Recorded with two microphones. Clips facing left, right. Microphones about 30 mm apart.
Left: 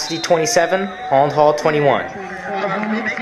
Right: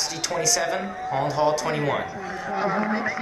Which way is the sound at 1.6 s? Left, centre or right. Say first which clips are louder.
Left 10 dB; left.